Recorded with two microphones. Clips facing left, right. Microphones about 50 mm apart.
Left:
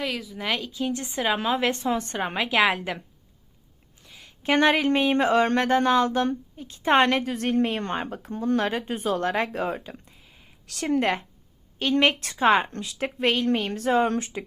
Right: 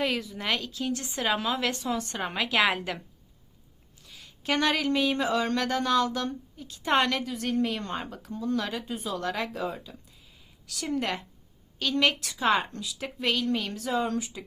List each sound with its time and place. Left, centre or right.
0.0 s speech: centre
0.7 s a woman's voice: centre
2.1 s a woman's voice: centre
4.0 s speech: left
11.8 s speech: left